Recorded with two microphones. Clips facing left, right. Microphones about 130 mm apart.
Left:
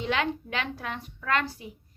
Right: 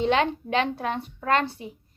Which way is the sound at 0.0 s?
25° right (ahead or behind).